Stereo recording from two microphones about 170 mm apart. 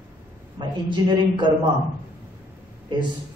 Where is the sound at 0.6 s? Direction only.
25° right (ahead or behind).